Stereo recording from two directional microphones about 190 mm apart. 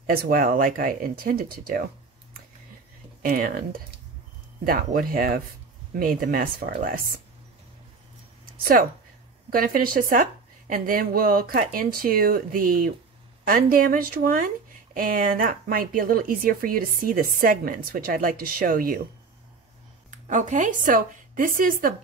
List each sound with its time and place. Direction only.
0.0 s speech: 50° right (ahead or behind)
3.2 s speech: 50° right (ahead or behind)
9.5 s speech: 45° right (ahead or behind)
20.1 s a woman's voice: 40° right (ahead or behind)